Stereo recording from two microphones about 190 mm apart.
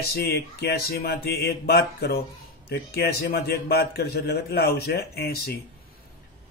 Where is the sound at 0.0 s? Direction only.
55° left (ahead or behind).